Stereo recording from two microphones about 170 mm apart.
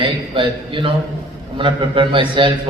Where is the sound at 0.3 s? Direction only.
30° right (ahead or behind).